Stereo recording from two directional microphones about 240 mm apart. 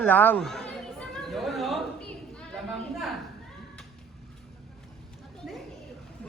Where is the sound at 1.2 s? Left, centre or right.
Centre.